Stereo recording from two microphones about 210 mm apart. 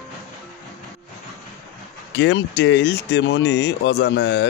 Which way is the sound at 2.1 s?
55° left (ahead or behind).